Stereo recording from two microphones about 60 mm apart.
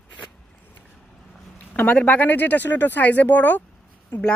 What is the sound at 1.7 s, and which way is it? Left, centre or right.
Speech, left.